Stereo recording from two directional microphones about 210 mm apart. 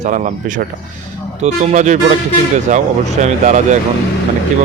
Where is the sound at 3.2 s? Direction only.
35° right (ahead or behind).